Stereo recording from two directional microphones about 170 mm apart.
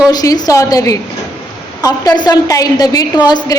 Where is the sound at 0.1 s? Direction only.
20° left (ahead or behind).